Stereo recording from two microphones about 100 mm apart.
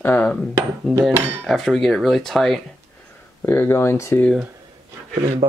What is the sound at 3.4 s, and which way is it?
Speech, 25° left (ahead or behind).